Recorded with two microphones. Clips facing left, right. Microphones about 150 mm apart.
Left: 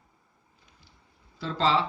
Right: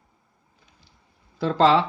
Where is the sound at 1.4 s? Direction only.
60° right (ahead or behind).